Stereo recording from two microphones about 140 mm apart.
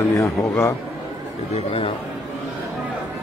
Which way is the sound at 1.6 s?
40° left (ahead or behind).